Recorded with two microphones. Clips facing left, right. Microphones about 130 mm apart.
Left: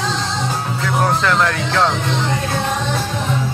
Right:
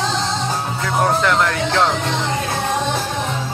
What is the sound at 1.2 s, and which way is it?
Speech, 20° right (ahead or behind).